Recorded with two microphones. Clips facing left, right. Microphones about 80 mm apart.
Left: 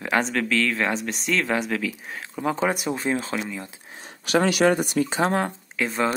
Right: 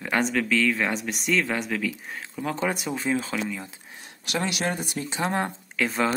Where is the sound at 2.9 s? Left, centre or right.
Left.